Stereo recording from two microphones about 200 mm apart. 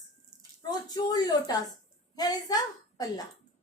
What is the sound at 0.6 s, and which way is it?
Speech, 20° left (ahead or behind).